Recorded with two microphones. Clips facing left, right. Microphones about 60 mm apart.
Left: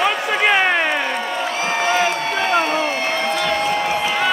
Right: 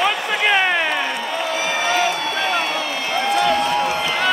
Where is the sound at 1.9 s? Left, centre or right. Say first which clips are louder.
Left 1 dB; left.